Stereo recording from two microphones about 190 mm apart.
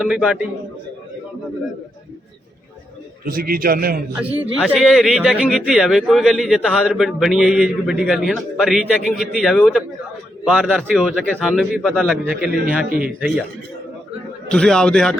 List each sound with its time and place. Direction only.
0.0 s speech: 5° right (ahead or behind)
3.2 s a man's voice: 50° right (ahead or behind)
4.1 s speech: 10° right (ahead or behind)
14.5 s speech: 5° left (ahead or behind)